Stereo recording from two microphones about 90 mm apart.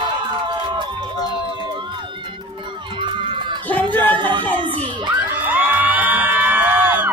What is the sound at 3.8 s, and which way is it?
Speech, 60° right (ahead or behind).